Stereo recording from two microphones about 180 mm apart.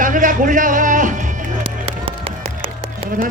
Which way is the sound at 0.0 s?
45° right (ahead or behind).